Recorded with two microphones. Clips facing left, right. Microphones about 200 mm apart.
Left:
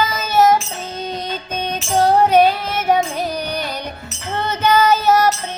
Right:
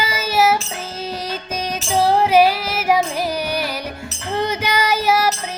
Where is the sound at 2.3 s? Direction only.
5° right (ahead or behind).